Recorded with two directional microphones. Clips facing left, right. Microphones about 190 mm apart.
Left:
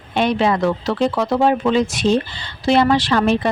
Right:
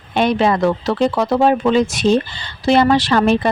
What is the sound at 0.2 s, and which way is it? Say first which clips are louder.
Speech: right 2 dB; 45° right (ahead or behind).